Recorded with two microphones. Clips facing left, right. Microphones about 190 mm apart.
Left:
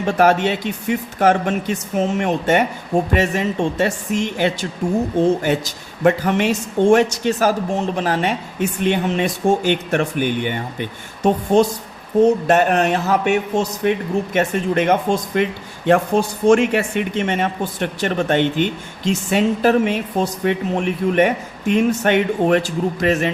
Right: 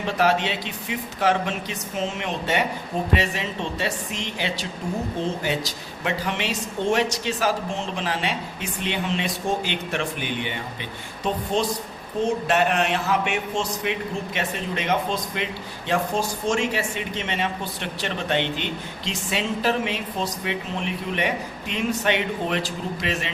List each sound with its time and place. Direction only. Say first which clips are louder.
0.0 s speech: left 6 dB; 50° left (ahead or behind)
6.0 s speech: left 11 dB; 50° left (ahead or behind)